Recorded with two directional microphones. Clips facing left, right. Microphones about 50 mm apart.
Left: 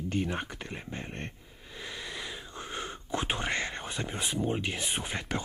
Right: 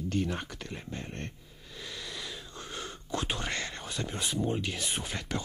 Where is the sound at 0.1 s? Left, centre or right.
Left.